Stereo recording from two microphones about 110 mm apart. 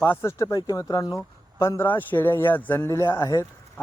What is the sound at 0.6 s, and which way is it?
A man's voice, 35° left (ahead or behind).